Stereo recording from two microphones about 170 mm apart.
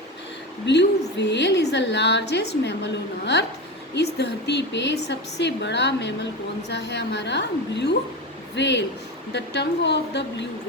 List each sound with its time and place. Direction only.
0.6 s a woman's voice: 90° left